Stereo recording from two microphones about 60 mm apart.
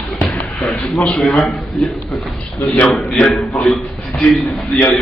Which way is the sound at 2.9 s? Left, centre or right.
Centre.